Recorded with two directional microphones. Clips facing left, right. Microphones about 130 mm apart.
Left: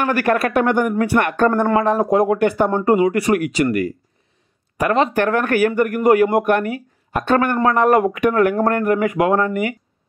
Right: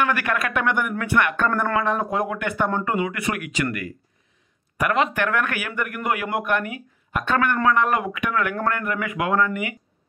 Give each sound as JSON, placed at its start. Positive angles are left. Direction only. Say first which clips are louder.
{"t": 0.0, "sound": "speech", "louder": "left 6 dB", "side_deg": 40}
{"t": 4.7, "sound": "speech", "louder": "left 5 dB", "side_deg": 30}